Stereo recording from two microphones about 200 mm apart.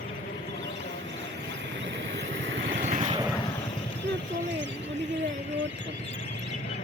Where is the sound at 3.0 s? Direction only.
25° right (ahead or behind).